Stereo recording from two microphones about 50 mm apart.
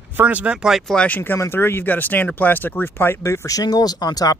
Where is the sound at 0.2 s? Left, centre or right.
Right.